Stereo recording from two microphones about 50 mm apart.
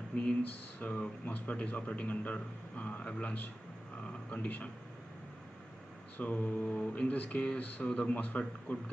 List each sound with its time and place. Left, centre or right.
0.1 s mantra: left
4.3 s a man's voice: left
6.1 s mantra: left